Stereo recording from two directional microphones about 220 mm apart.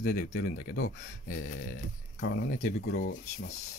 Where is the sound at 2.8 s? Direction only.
45° left (ahead or behind).